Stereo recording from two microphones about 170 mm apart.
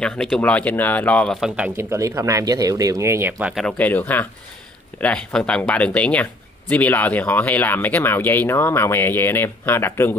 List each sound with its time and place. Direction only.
0.0 s speech: 5° left (ahead or behind)
1.8 s speech: 15° right (ahead or behind)
3.6 s speech: 10° left (ahead or behind)